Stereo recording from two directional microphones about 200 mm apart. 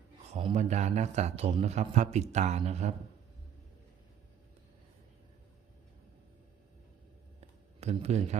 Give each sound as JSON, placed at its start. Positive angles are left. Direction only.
{"t": 0.3, "sound": "a man's voice", "side_deg": -35}
{"t": 7.8, "sound": "speech", "side_deg": -30}